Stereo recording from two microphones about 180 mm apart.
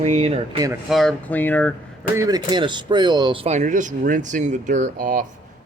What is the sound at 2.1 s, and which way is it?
Speech, 20° right (ahead or behind).